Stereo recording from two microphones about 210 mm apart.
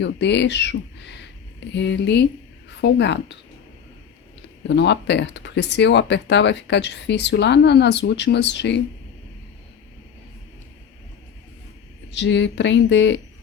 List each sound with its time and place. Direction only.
0.0 s speech: 55° left (ahead or behind)
4.7 s speech: 55° left (ahead or behind)
12.1 s speech: 60° left (ahead or behind)